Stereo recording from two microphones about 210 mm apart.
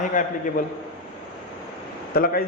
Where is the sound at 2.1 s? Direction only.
45° left (ahead or behind).